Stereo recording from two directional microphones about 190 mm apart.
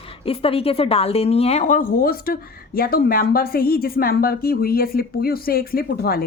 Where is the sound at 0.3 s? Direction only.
30° left (ahead or behind).